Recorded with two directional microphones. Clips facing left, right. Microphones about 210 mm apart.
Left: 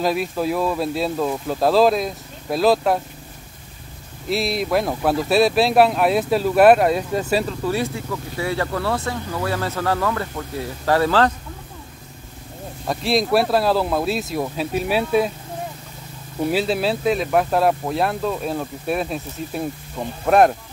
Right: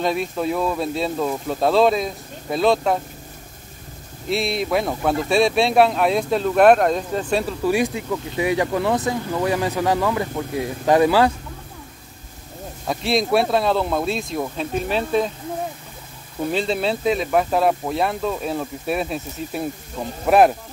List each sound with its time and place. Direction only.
0.0 s speech: 5° left (ahead or behind)
4.3 s speech: centre (ahead or behind)
7.4 s speech: 15° right (ahead or behind)
12.8 s speech: centre (ahead or behind)
16.4 s speech: 5° left (ahead or behind)